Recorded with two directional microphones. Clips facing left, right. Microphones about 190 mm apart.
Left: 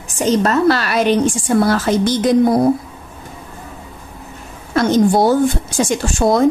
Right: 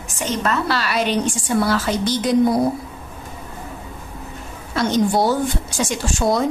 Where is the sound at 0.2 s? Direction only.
35° left (ahead or behind).